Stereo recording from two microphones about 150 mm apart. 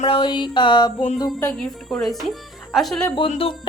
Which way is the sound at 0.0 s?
30° left (ahead or behind).